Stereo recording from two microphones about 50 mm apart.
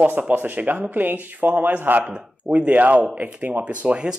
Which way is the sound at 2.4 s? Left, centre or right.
Right.